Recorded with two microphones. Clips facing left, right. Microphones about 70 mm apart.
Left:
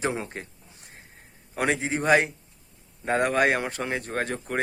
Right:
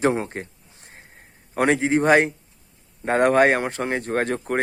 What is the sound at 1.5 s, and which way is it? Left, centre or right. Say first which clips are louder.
Speech: right 7 dB; right.